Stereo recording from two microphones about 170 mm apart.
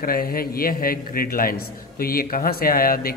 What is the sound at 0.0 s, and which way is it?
A man's voice, 60° left (ahead or behind).